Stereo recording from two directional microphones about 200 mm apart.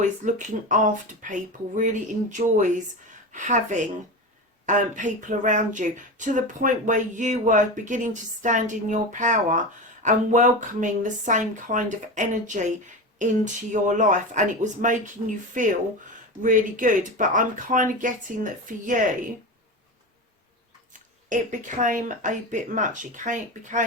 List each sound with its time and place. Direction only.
0.0 s speech: 40° right (ahead or behind)
21.2 s speech: 40° right (ahead or behind)